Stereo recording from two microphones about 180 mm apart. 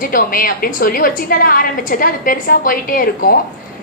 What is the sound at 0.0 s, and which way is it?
A woman's voice, 50° left (ahead or behind).